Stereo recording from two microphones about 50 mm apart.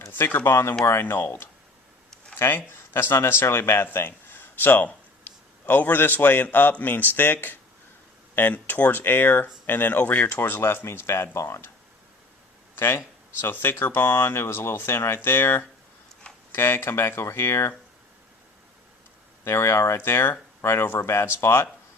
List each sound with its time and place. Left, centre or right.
0.1 s speech: left
2.4 s speech: left
12.7 s speech: left
19.5 s speech: left
20.1 s speech: left